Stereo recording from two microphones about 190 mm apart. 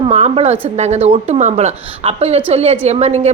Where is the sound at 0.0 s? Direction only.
35° right (ahead or behind).